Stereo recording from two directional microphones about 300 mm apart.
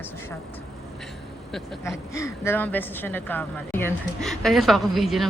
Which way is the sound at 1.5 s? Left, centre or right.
Centre.